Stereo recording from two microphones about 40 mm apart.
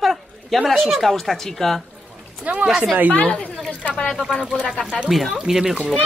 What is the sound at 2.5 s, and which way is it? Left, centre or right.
Speech, right.